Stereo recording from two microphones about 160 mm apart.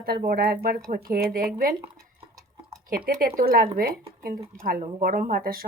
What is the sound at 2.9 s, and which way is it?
Speech, 65° right (ahead or behind).